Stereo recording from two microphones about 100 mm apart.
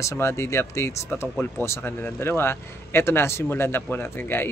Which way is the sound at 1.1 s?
15° left (ahead or behind).